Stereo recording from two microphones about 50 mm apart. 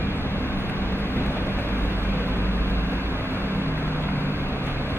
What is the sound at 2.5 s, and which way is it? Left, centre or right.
Vehicle, right.